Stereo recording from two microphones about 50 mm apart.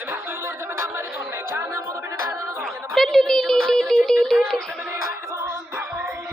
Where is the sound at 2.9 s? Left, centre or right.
Centre.